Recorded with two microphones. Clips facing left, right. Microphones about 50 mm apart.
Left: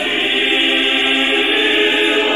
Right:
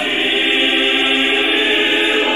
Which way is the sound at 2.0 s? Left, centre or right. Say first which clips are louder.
Left 1 dB; right.